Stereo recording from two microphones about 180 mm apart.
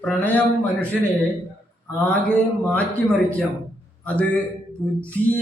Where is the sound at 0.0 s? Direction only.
10° left (ahead or behind).